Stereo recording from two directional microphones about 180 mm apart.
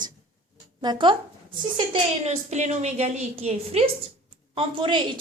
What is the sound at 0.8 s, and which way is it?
A woman's voice, 25° right (ahead or behind).